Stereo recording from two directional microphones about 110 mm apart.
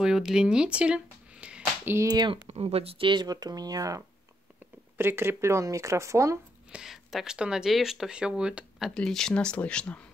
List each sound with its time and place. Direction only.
0.0 s a sound: 5° right (ahead or behind)
2.0 s speech: 35° right (ahead or behind)
2.4 s speech: 65° right (ahead or behind); by 4.0 s 35° right (ahead or behind)
4.9 s speech: 20° right (ahead or behind)
6.7 s speech: 5° right (ahead or behind)